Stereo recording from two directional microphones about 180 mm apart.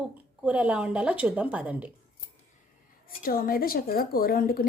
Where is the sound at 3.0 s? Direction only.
55° left (ahead or behind).